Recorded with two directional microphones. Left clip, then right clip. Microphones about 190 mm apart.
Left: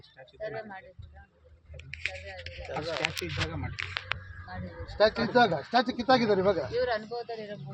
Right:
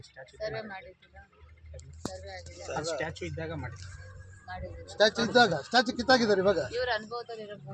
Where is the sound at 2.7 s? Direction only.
5° left (ahead or behind).